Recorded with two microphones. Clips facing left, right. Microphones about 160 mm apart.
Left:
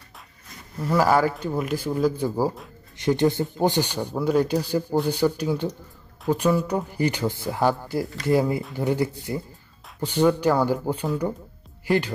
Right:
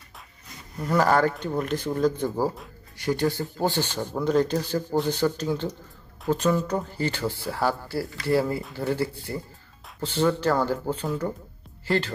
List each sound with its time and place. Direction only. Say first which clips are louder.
0.7 s speech: left 1 dB; 5° left (ahead or behind)
3.0 s speech: left 4 dB; 20° left (ahead or behind)